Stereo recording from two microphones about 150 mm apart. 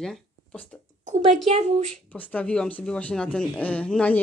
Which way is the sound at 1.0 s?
50° right (ahead or behind).